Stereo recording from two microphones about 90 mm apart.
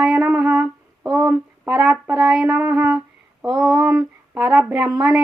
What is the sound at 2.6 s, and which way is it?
Speech, 15° right (ahead or behind).